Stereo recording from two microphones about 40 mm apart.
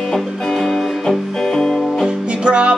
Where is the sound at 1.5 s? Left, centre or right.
Centre.